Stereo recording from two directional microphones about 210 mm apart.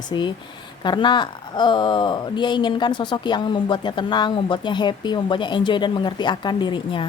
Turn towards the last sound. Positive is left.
turn(degrees=20)  # may be behind; listen again after turning